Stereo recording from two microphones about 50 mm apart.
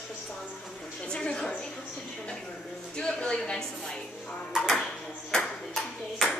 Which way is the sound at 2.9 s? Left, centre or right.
Centre.